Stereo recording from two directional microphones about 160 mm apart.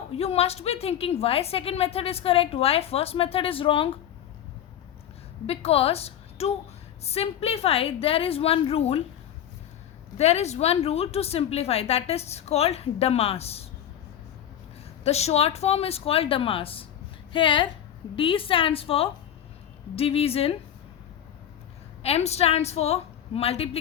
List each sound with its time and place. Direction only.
0.1 s a woman's voice: 40° left (ahead or behind)
5.5 s a woman's voice: 40° left (ahead or behind)
10.2 s a woman's voice: 40° left (ahead or behind)
15.0 s a woman's voice: 40° left (ahead or behind)
22.0 s a woman's voice: 40° left (ahead or behind)